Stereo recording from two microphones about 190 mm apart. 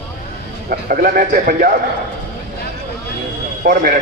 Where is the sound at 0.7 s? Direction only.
50° right (ahead or behind).